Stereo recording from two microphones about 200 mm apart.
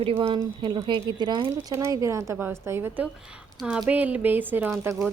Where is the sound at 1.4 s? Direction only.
10° right (ahead or behind).